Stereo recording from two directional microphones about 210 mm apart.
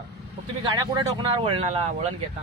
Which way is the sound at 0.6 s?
20° right (ahead or behind).